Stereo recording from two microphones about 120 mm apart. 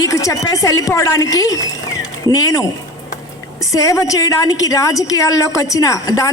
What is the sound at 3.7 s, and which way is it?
A woman's voice, 25° left (ahead or behind).